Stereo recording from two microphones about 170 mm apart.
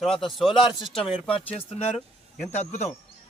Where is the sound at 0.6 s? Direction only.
Centre (ahead or behind).